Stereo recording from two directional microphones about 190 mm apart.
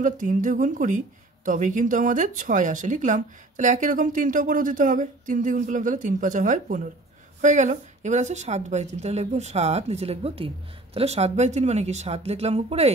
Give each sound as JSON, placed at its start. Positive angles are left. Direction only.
{"t": 0.0, "sound": "a woman's voice", "side_deg": -40}